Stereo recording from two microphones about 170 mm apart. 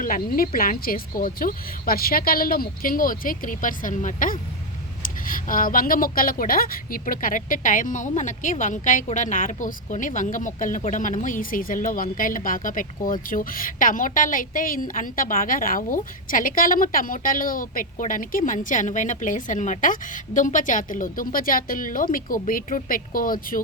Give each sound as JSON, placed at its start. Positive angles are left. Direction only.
{"t": 0.0, "sound": "a woman's voice", "side_deg": 55}